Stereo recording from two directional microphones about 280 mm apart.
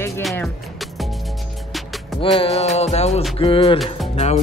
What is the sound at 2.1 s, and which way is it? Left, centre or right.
Music, centre.